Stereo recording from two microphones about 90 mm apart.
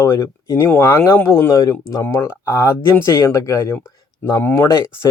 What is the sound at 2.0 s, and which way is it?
Speech, 30° left (ahead or behind).